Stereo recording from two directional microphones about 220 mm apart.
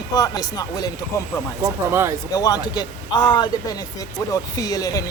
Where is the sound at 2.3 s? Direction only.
15° left (ahead or behind).